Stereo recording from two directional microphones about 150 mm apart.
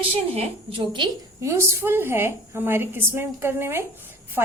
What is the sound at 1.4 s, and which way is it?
A woman's voice, 20° right (ahead or behind).